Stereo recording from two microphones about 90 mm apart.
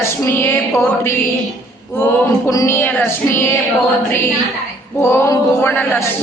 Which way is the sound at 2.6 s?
25° left (ahead or behind).